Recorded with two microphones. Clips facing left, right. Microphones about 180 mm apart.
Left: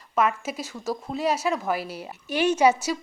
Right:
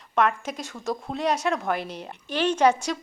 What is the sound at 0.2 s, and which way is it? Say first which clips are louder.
A woman's voice: even; 5° left (ahead or behind).